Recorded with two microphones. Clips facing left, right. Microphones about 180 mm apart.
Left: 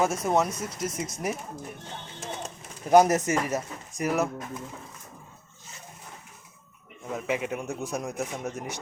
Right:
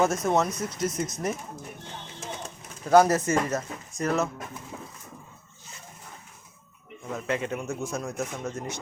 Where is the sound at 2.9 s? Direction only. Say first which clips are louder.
Even; 20° left (ahead or behind).